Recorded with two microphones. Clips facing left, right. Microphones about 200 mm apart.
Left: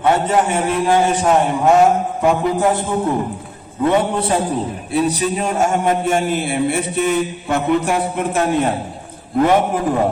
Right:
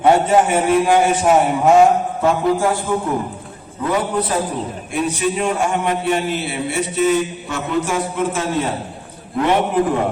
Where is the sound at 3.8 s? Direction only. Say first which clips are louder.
Left 3 dB; 25° left (ahead or behind); by 8.7 s 55° left (ahead or behind).